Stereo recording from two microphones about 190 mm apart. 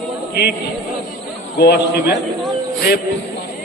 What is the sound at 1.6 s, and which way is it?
Speech, 60° left (ahead or behind).